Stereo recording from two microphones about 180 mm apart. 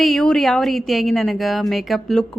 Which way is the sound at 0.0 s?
5° left (ahead or behind).